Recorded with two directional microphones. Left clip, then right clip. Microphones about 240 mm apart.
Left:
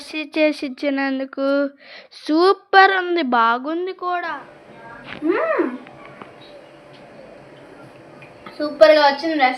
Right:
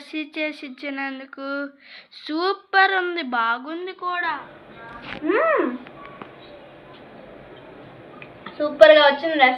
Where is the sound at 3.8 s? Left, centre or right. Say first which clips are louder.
Left 2 dB; left.